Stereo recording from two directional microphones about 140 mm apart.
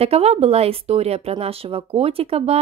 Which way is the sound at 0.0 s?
45° right (ahead or behind).